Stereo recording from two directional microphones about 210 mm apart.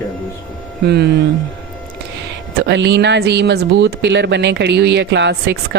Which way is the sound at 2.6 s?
55° right (ahead or behind).